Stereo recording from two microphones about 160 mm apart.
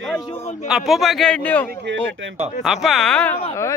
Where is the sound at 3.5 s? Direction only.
20° left (ahead or behind).